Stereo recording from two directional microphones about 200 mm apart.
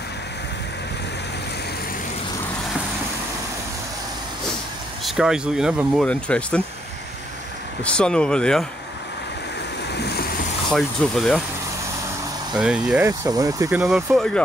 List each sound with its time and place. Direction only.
5.0 s speech: centre (ahead or behind)
7.8 s speech: 5° left (ahead or behind)
9.9 s vehicle: 55° left (ahead or behind)
10.7 s speech: centre (ahead or behind)
12.5 s speech: 5° right (ahead or behind)